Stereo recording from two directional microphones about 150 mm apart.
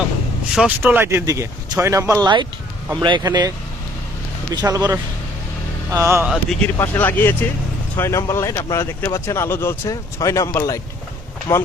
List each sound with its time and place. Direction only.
0.8 s speech: 15° right (ahead or behind)
4.5 s speech: 25° right (ahead or behind)
6.2 s speech: centre (ahead or behind)
6.7 s speech: 15° left (ahead or behind)